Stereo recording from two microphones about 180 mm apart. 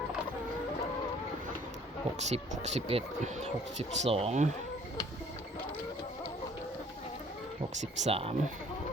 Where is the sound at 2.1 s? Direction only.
40° right (ahead or behind).